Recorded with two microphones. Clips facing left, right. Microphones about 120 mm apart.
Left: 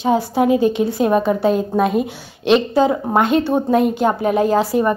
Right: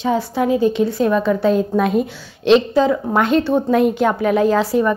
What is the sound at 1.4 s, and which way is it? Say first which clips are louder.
A woman's voice: even; 5° left (ahead or behind).